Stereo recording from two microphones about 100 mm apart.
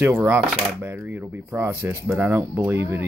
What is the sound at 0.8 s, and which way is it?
Speech, 20° right (ahead or behind).